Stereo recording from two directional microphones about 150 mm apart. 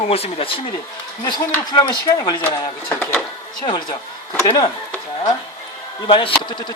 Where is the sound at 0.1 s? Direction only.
40° left (ahead or behind).